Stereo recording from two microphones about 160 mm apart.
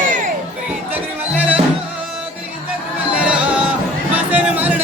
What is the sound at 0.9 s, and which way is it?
Music, 10° right (ahead or behind).